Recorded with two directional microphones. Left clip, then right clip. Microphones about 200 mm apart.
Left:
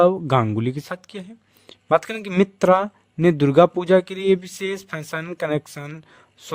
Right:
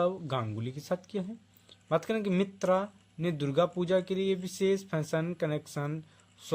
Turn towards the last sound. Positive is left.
turn(degrees=50)  # may be behind; listen again after turning